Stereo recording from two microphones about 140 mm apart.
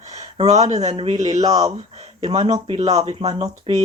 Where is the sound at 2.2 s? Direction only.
50° right (ahead or behind).